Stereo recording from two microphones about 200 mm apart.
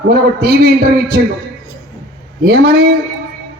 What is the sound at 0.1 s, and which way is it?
Speech, 55° right (ahead or behind).